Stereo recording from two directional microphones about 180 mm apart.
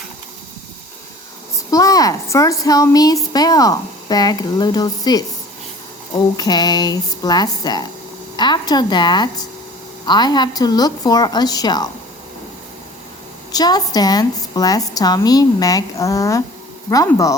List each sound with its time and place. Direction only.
1.7 s a woman's voice: 20° left (ahead or behind)
6.3 s a woman's voice: 20° left (ahead or behind)
13.5 s a woman's voice: 20° left (ahead or behind)